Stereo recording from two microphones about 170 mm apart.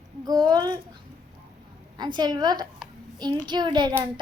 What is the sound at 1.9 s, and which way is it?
A woman's voice, 25° right (ahead or behind).